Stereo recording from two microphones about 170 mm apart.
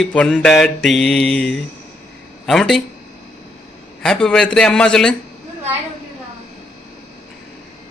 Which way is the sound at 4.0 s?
5° left (ahead or behind).